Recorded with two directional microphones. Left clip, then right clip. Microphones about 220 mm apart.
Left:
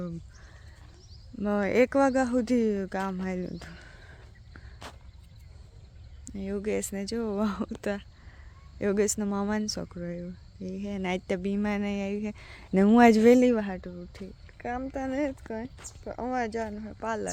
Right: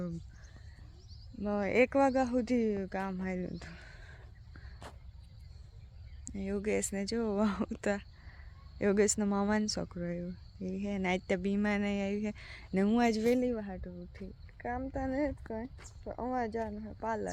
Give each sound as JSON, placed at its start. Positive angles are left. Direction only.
{"t": 1.4, "sound": "speech", "side_deg": 25}
{"t": 6.2, "sound": "speech", "side_deg": 5}
{"t": 7.8, "sound": "a sound", "side_deg": 0}
{"t": 8.8, "sound": "speech", "side_deg": 0}
{"t": 12.7, "sound": "speech", "side_deg": 30}
{"t": 14.2, "sound": "speech", "side_deg": 10}